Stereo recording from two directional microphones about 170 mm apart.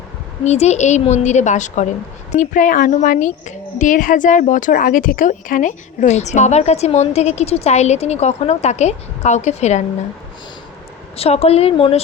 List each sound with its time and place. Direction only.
0.4 s a woman's voice: 40° left (ahead or behind)
11.2 s speech: 35° left (ahead or behind)